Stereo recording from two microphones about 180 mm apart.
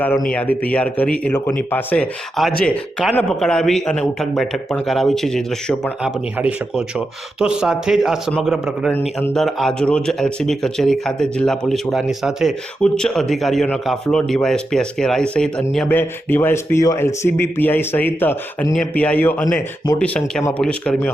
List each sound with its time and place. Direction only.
0.3 s a man's voice: 10° left (ahead or behind)
8.9 s a man's voice: 10° left (ahead or behind)